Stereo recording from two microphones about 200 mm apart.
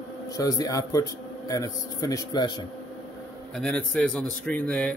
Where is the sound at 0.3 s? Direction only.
15° left (ahead or behind).